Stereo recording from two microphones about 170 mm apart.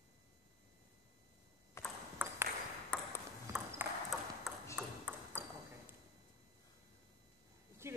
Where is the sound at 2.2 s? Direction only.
10° right (ahead or behind).